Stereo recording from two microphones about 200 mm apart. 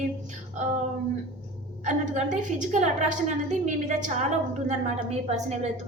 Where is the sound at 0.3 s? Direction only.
35° right (ahead or behind).